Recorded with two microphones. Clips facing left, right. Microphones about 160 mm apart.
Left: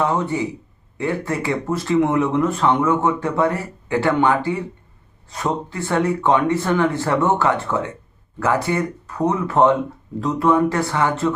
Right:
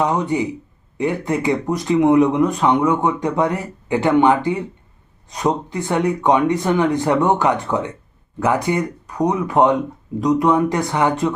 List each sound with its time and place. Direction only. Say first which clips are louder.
0.0 s speech: right 2 dB; 15° right (ahead or behind)